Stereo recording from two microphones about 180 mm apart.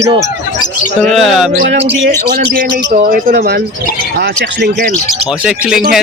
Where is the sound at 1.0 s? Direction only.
Centre (ahead or behind).